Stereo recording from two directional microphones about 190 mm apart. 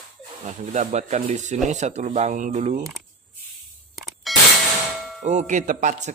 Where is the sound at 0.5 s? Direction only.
45° right (ahead or behind).